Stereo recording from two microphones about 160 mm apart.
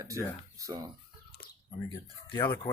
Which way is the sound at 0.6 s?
20° right (ahead or behind).